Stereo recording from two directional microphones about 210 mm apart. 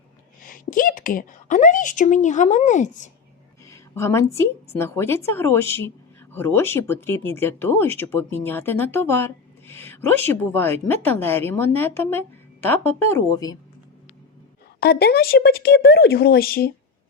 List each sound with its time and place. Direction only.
0.4 s a woman's voice: 40° left (ahead or behind)
3.7 s a woman's voice: 15° left (ahead or behind)
14.8 s a woman's voice: 50° left (ahead or behind)